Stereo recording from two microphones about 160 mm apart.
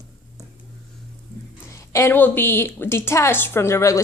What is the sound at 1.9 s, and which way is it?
A woman's voice, 15° left (ahead or behind).